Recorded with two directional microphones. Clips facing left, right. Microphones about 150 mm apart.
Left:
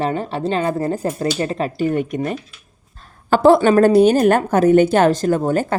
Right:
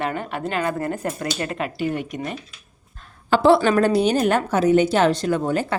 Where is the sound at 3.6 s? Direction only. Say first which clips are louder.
Left 6 dB; 45° left (ahead or behind).